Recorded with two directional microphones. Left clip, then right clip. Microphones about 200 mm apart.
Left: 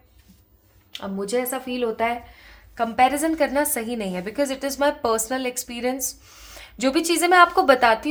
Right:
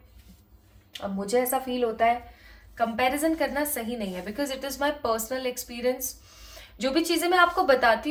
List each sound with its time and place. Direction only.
0.9 s speech: 25° left (ahead or behind)
2.7 s a woman's voice: 55° left (ahead or behind)